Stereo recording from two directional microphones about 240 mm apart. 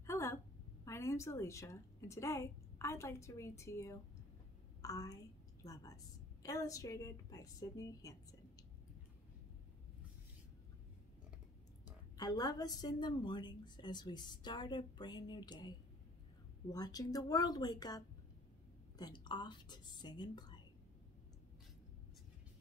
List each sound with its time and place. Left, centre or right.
0.0 s a sound: centre
0.8 s a woman's voice: centre
12.2 s a woman's voice: centre
16.7 s a woman's voice: centre